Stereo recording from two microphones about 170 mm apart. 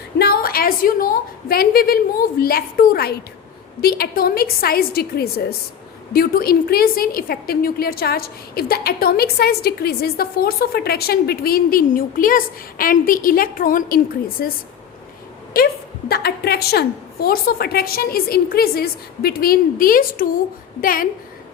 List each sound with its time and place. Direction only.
0.2 s a woman's voice: 65° left (ahead or behind)